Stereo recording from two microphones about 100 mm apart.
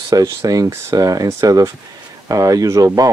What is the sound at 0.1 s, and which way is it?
Speech, 35° right (ahead or behind).